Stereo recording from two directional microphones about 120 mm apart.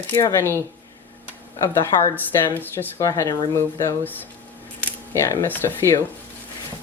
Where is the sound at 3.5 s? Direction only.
25° left (ahead or behind).